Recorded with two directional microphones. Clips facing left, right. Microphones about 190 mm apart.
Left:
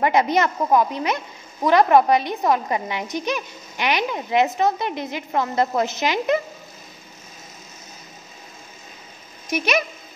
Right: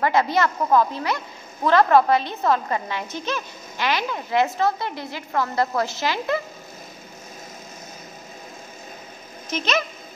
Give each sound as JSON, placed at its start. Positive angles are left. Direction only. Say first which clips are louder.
{"t": 0.0, "sound": "a woman's voice", "louder": "left 2 dB", "side_deg": 20}
{"t": 9.5, "sound": "a woman's voice", "louder": "left 2 dB", "side_deg": 15}